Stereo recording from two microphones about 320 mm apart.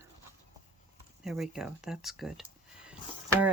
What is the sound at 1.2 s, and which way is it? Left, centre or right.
Speech, centre.